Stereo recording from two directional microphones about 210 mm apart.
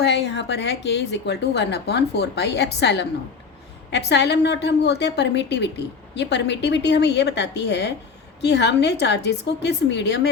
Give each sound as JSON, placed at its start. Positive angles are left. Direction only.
{"t": 0.0, "sound": "a woman's voice", "side_deg": 55}